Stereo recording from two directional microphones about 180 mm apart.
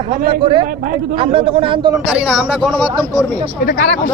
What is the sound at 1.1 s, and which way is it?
Speech, 30° right (ahead or behind).